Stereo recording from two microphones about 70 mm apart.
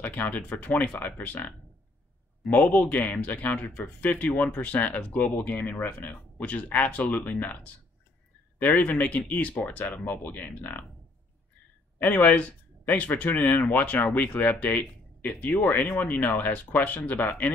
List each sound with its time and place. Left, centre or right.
0.0 s speech: left
2.5 s speech: left
12.0 s speech: left